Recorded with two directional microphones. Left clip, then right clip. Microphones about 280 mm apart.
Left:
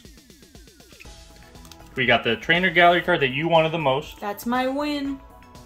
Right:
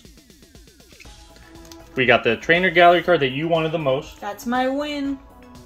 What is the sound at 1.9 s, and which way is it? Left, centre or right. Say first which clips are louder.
Speech: right 3 dB; centre.